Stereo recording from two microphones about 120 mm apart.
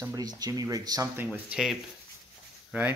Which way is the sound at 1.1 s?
15° right (ahead or behind).